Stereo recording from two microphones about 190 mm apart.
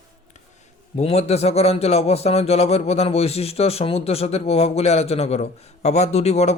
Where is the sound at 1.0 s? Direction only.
35° left (ahead or behind).